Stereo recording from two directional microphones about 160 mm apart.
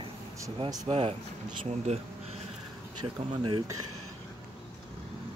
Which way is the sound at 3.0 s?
30° right (ahead or behind).